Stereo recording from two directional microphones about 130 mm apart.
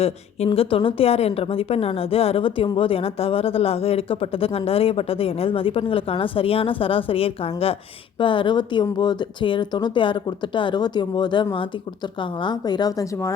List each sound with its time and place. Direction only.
0.0 s speech: 50° left (ahead or behind); by 13.1 s 30° left (ahead or behind)